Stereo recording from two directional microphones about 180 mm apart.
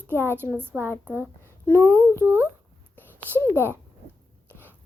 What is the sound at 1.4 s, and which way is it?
Speech, 10° left (ahead or behind).